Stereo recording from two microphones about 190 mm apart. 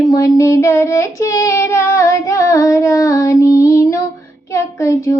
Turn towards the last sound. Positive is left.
turn(degrees=15)  # may be behind; listen again after turning